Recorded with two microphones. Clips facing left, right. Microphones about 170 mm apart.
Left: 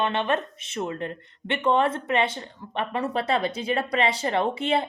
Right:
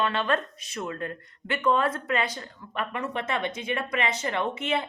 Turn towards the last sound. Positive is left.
turn(degrees=30)  # may be behind; listen again after turning